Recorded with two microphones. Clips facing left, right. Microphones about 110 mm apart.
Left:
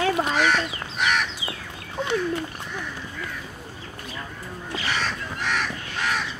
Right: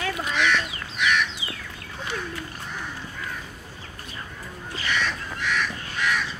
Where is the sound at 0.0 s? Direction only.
35° left (ahead or behind).